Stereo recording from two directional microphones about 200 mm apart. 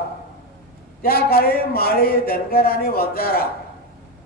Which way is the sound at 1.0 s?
50° left (ahead or behind).